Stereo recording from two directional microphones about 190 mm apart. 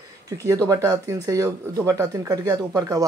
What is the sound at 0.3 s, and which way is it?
Speech, 15° right (ahead or behind).